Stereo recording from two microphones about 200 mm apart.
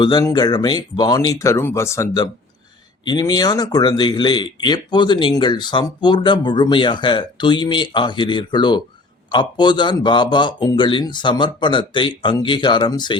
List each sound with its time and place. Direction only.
0.0 s speech: 20° left (ahead or behind)